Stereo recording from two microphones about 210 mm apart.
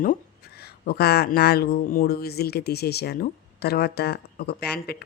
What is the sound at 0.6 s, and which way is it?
Speech, 50° left (ahead or behind).